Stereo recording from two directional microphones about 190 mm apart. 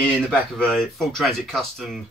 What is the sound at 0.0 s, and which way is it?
Speech, 5° left (ahead or behind).